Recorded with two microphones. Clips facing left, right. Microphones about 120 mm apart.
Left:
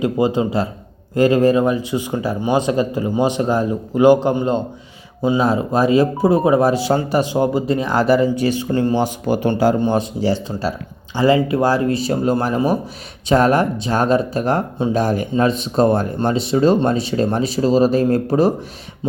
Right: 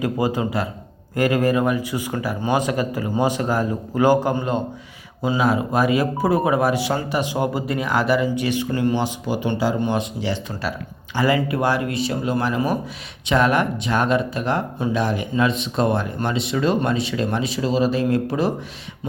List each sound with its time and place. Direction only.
0.0 s speech: 25° left (ahead or behind)
9.0 s speech: 45° left (ahead or behind)
9.8 s speech: 35° left (ahead or behind)